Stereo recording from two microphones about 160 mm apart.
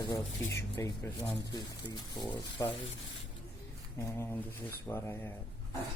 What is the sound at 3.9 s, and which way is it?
Speech, 15° left (ahead or behind).